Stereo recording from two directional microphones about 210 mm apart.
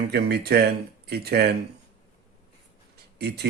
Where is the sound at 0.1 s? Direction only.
50° right (ahead or behind).